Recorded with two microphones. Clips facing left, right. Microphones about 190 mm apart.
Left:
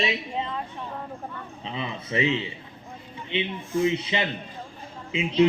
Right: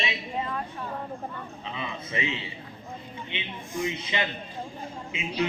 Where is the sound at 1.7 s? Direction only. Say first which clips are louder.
Left 6 dB; 30° left (ahead or behind).